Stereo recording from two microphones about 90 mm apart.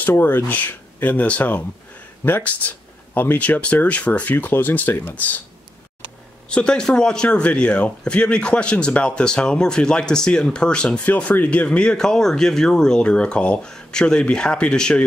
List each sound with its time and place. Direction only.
0.0 s speech: 20° left (ahead or behind)
6.5 s speech: 10° left (ahead or behind)